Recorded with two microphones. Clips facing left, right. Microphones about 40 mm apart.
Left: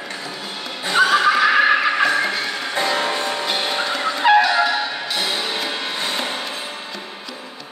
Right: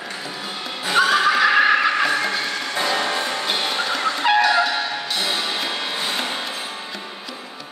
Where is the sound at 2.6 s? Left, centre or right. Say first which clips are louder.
Left 1 dB; centre.